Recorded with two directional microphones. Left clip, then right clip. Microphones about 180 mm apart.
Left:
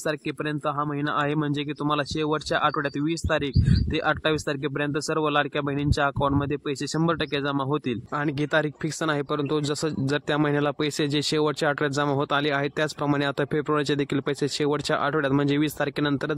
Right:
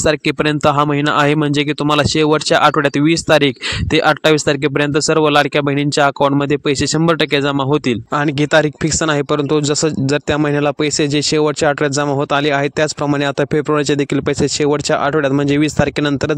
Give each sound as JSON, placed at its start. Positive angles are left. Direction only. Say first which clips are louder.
{"t": 0.0, "sound": "speech", "louder": "right 14 dB", "side_deg": -55}
{"t": 13.1, "sound": "speech", "louder": "right 9 dB", "side_deg": -35}